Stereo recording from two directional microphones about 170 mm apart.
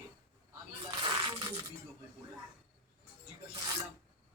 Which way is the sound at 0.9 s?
25° right (ahead or behind).